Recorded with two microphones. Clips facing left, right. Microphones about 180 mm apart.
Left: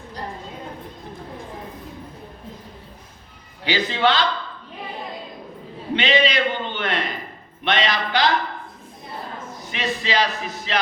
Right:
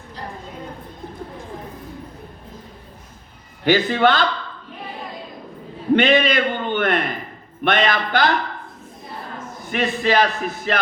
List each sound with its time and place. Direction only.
3.6 s music: 50° right (ahead or behind)
5.9 s a man's voice: 50° right (ahead or behind)
7.6 s music: 50° right (ahead or behind)
9.6 s music: 50° right (ahead or behind)